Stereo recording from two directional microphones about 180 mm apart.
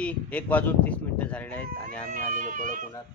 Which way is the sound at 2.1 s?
45° right (ahead or behind).